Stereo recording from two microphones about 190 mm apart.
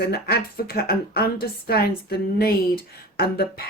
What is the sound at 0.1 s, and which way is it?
A woman's voice, 55° left (ahead or behind).